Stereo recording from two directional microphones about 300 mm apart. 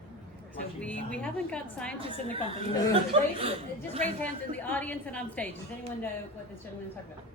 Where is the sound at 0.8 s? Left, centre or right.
Centre.